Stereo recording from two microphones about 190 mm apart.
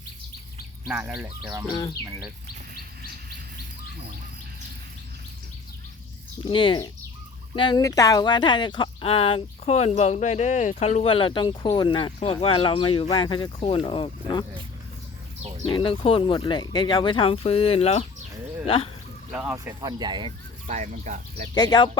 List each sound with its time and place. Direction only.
0.9 s speech: 10° right (ahead or behind)
1.7 s speech: 20° left (ahead or behind)
6.4 s speech: 25° left (ahead or behind)
15.6 s speech: 25° left (ahead or behind)
19.3 s speech: 10° right (ahead or behind)
19.5 s speech: 20° right (ahead or behind)
20.7 s speech: 40° right (ahead or behind)
21.5 s speech: 20° left (ahead or behind)